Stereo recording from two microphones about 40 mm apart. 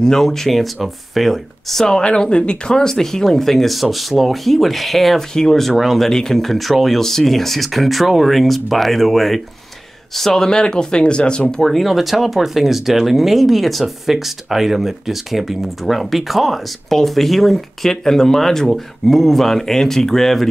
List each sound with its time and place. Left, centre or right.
0.0 s speech: centre
1.9 s speech: centre
5.3 s speech: centre
5.8 s speech: centre
6.0 s speech: centre
10.5 s speech: centre
11.5 s speech: centre
11.8 s speech: centre